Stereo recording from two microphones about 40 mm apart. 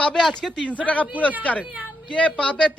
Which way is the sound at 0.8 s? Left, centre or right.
Left.